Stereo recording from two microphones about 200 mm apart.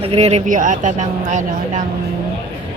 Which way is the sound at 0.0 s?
30° right (ahead or behind).